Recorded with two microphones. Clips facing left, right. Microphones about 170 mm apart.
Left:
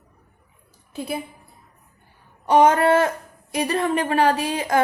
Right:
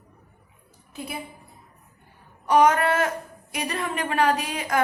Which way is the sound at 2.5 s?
25° left (ahead or behind).